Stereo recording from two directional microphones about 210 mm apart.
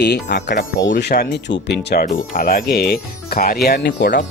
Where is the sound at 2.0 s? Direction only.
40° left (ahead or behind).